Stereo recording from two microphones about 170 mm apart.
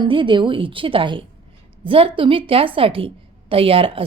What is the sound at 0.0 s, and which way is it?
A woman's voice, 30° right (ahead or behind).